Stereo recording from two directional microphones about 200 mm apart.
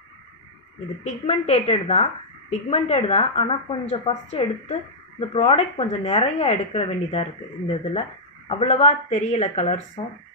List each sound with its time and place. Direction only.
1.0 s a woman's voice: 35° left (ahead or behind)